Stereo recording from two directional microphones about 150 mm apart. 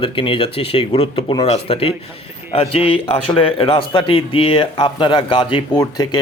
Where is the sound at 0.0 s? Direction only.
35° left (ahead or behind).